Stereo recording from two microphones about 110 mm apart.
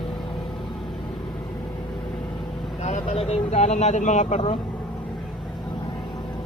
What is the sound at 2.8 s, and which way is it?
Speech, 80° left.